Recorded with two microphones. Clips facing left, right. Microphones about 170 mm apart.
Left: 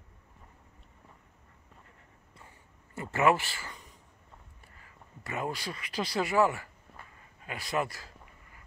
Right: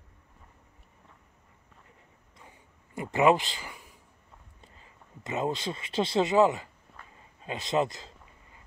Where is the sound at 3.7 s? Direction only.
5° right (ahead or behind).